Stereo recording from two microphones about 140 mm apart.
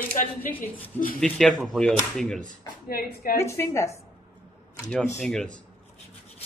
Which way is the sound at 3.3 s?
20° left (ahead or behind).